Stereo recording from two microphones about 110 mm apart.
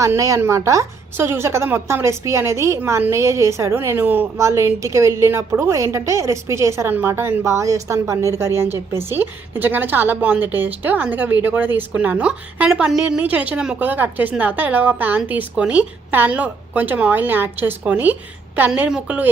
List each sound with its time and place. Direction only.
0.0 s a woman's voice: 30° right (ahead or behind); by 19.3 s 15° right (ahead or behind)